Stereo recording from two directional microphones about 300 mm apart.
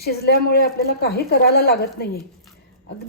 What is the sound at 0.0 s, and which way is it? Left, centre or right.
A woman's voice, left.